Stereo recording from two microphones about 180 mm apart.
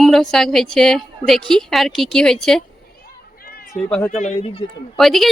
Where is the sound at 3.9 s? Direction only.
5° left (ahead or behind).